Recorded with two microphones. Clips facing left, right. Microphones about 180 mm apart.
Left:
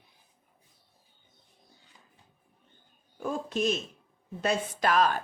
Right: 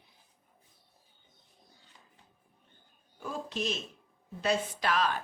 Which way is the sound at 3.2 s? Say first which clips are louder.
Left 6 dB; 50° left (ahead or behind).